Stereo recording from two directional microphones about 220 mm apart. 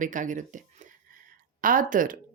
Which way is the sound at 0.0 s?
35° right (ahead or behind).